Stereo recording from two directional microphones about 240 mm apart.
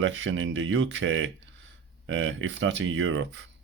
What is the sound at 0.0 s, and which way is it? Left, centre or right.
Speech, right.